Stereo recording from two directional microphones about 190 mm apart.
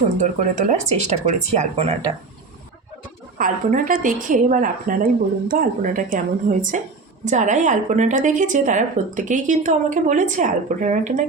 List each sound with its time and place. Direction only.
0.2 s speech: 40° right (ahead or behind)
3.3 s a woman's voice: 45° right (ahead or behind)